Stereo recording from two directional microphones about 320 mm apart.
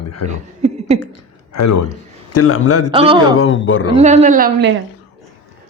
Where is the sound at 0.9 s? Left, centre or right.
Left.